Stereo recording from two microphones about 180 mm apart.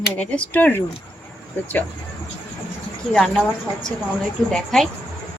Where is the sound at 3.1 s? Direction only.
Centre (ahead or behind).